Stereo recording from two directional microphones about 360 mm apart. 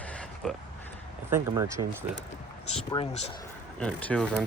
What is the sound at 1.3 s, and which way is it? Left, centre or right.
Speech, centre.